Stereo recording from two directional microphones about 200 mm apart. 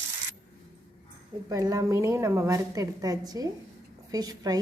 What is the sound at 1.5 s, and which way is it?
A woman's voice, 15° right (ahead or behind).